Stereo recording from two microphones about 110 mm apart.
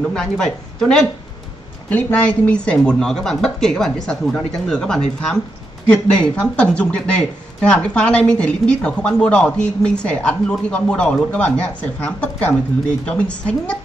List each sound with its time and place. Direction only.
0.0 s speech: 5° left (ahead or behind)